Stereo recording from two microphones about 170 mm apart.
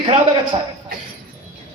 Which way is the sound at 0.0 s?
30° right (ahead or behind).